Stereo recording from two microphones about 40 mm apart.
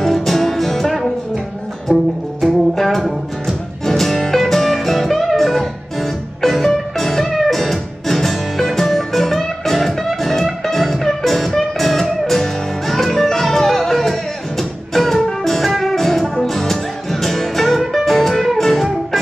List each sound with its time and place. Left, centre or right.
0.0 s music: centre
1.9 s music: right
2.4 s music: centre